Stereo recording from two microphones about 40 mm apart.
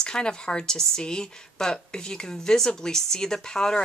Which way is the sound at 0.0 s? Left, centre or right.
Centre.